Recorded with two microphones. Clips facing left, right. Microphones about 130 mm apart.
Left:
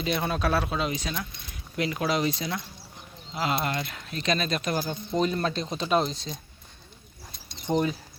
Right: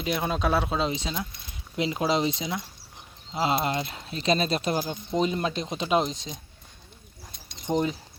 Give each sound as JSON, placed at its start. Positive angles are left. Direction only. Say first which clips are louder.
{"t": 0.0, "sound": "speech", "louder": "even", "side_deg": -10}
{"t": 7.7, "sound": "speech", "louder": "even", "side_deg": -20}